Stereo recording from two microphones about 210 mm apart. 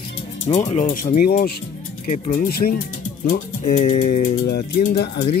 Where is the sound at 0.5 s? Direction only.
35° left (ahead or behind).